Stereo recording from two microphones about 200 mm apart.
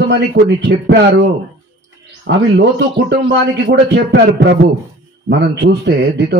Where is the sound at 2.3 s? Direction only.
65° right (ahead or behind).